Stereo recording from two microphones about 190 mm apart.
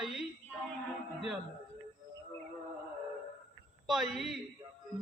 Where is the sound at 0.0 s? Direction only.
Centre (ahead or behind).